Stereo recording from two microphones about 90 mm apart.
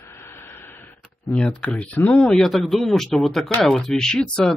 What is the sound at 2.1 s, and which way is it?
A man's voice, 5° left (ahead or behind).